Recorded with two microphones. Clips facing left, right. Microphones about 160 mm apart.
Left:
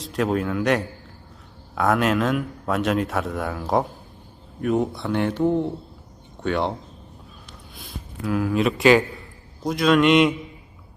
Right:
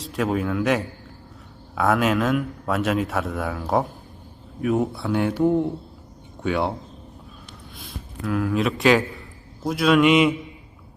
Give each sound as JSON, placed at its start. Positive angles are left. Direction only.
{"t": 0.0, "sound": "a man's voice", "side_deg": 0}
{"t": 7.8, "sound": "a man's voice", "side_deg": 0}